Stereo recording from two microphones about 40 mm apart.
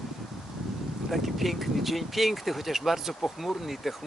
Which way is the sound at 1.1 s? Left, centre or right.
Centre.